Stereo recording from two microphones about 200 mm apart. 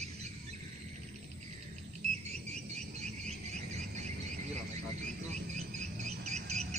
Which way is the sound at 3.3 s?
35° right (ahead or behind).